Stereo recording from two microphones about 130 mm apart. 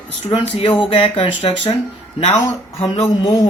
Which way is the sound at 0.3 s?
40° left (ahead or behind).